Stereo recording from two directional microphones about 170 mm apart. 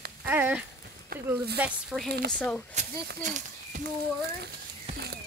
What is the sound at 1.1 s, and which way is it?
Speech, 65° right (ahead or behind).